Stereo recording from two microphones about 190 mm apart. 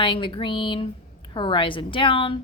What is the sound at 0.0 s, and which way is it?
A woman's voice, 25° left (ahead or behind).